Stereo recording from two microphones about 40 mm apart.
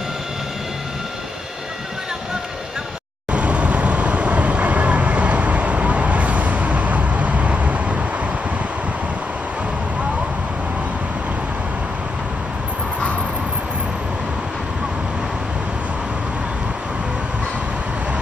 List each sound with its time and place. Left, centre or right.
3.3 s vehicle: right